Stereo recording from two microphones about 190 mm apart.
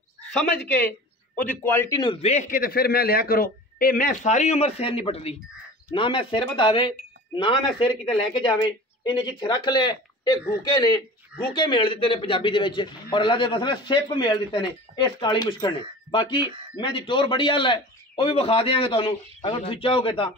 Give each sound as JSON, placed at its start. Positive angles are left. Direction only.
{"t": 1.3, "sound": "a man's voice", "side_deg": 10}
{"t": 2.2, "sound": "a man's voice", "side_deg": 40}